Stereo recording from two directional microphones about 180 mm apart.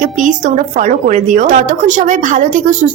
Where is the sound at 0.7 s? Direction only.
45° right (ahead or behind).